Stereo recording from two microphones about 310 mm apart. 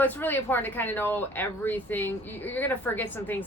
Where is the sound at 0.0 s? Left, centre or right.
Centre.